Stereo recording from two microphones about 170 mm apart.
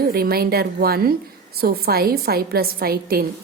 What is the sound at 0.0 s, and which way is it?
A woman's voice, 65° right (ahead or behind).